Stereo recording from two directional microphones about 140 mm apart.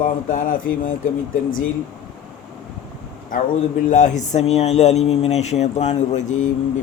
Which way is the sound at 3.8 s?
65° left (ahead or behind).